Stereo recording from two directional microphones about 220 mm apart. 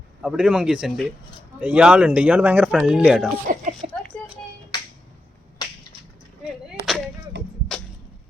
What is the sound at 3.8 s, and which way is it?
Speech, 35° right (ahead or behind).